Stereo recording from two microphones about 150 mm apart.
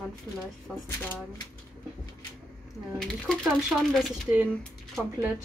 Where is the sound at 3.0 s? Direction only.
5° left (ahead or behind).